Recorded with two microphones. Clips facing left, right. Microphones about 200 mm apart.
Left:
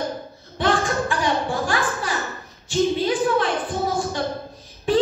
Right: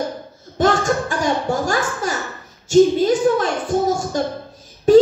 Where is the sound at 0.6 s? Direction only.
45° right (ahead or behind).